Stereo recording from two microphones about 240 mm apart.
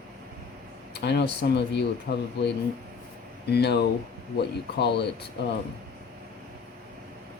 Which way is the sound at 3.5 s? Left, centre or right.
Left.